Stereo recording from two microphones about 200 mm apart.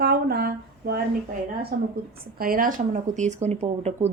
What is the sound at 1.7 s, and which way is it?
A woman's voice, 50° right (ahead or behind).